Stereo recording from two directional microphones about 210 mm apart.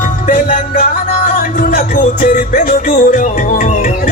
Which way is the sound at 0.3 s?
45° left (ahead or behind).